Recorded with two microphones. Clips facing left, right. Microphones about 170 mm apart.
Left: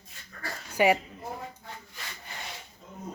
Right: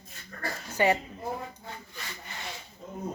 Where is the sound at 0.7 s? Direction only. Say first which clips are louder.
Left 2 dB; 10° left (ahead or behind).